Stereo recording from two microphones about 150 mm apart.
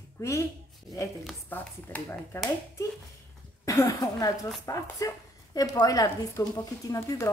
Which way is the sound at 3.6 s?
20° left (ahead or behind).